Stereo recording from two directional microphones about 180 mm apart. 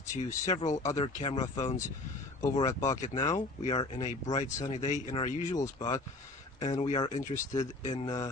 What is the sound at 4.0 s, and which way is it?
Speech, 40° left (ahead or behind).